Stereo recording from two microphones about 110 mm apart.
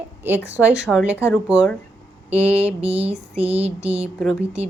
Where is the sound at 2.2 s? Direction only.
75° right (ahead or behind).